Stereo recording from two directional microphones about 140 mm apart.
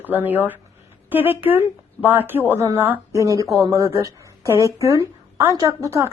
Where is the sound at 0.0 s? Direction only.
15° right (ahead or behind).